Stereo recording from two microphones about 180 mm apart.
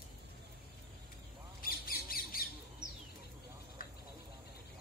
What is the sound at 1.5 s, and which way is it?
Squawk, 55° left (ahead or behind).